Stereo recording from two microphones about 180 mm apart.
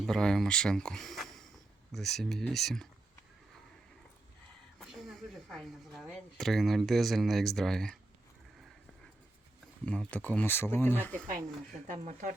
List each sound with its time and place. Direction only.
0.1 s speech: 5° left (ahead or behind)
4.8 s speech: centre (ahead or behind)
9.8 s speech: 5° left (ahead or behind)
11.9 s speech: 45° right (ahead or behind)